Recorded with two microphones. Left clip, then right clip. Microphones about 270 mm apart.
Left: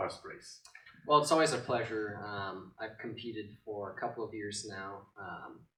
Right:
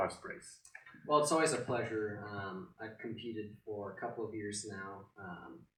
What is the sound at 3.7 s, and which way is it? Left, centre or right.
Speech, centre.